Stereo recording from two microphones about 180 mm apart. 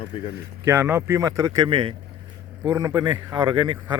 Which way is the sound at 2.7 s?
20° right (ahead or behind).